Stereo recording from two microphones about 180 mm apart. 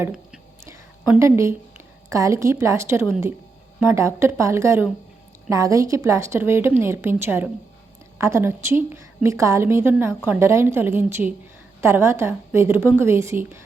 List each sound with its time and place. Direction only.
0.0 s speech: 5° right (ahead or behind)
0.6 s whispering: 15° right (ahead or behind)
1.2 s a woman's voice: 15° right (ahead or behind)